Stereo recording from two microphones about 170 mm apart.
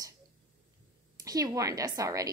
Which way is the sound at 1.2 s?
20° right (ahead or behind).